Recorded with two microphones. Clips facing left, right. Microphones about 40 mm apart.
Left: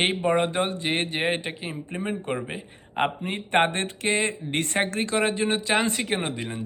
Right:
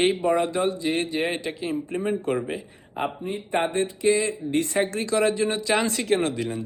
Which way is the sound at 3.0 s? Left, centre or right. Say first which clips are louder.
Left 2 dB; left.